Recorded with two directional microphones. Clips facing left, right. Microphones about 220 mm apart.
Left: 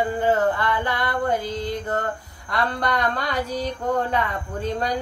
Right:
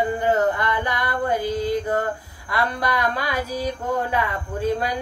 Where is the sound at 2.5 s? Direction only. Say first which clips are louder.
Even; 10° right (ahead or behind).